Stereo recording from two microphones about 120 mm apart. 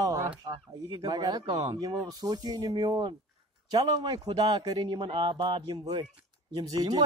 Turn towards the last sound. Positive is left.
turn(degrees=-35)  # may be behind; listen again after turning